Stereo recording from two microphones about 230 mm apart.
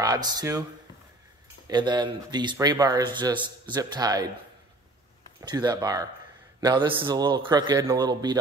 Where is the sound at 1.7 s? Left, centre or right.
Centre.